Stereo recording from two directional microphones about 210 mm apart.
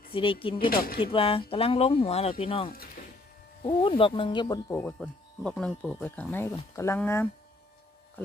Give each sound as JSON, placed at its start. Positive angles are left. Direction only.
{"t": 0.1, "sound": "speech", "side_deg": 25}
{"t": 0.7, "sound": "speech", "side_deg": 45}
{"t": 0.9, "sound": "speech", "side_deg": 25}
{"t": 2.6, "sound": "speech", "side_deg": 45}
{"t": 3.6, "sound": "speech", "side_deg": 25}